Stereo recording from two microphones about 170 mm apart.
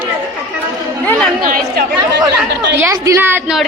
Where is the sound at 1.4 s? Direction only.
55° right (ahead or behind).